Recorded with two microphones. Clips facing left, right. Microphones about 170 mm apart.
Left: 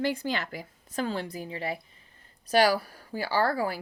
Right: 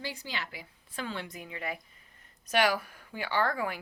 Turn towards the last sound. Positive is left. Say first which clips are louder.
# left 4 dB
turn(degrees=35)  # may be behind; listen again after turning